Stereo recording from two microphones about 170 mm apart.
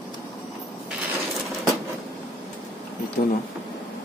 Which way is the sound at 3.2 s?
60° left (ahead or behind).